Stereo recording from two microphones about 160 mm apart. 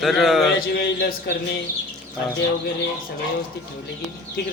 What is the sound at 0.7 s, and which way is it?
Speech, 80° left.